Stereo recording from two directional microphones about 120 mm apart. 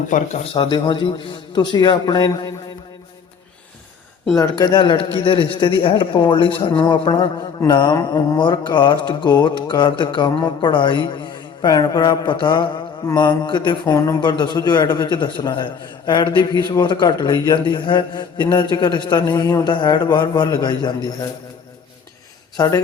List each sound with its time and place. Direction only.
0.1 s speech: 90° left
0.5 s speech: 40° left (ahead or behind)
4.4 s speech: 30° left (ahead or behind)
22.5 s speech: 25° left (ahead or behind)